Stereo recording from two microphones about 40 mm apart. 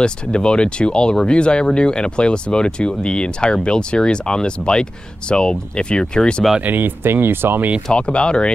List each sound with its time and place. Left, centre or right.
0.0 s speech: left
6.6 s speech: right
7.0 s speech: right
7.9 s speech: left